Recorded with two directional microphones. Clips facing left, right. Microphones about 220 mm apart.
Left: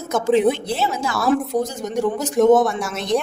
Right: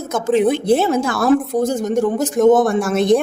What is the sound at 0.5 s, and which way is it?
A woman's voice, 50° right (ahead or behind).